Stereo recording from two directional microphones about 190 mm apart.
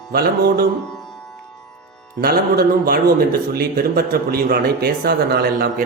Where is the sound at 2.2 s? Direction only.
50° right (ahead or behind).